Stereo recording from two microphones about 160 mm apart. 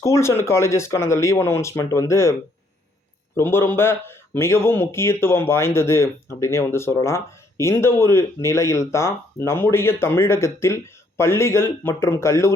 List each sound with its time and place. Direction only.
0.0 s speech: 15° left (ahead or behind)
3.3 s speech: 15° left (ahead or behind)